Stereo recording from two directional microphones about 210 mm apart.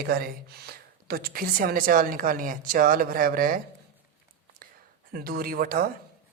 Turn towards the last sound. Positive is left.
turn(degrees=-45)  # may be behind; listen again after turning